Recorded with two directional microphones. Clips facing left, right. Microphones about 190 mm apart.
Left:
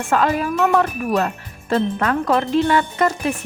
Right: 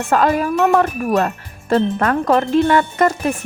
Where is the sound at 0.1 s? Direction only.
40° right (ahead or behind).